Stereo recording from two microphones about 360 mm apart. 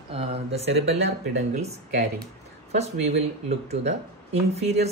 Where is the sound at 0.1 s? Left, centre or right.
Centre.